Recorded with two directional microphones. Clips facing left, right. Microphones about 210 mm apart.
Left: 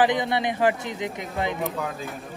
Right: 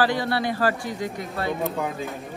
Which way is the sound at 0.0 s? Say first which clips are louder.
Left 1 dB; 20° left (ahead or behind).